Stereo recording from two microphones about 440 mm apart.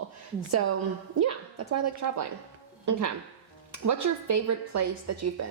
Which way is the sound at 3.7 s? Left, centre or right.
Right.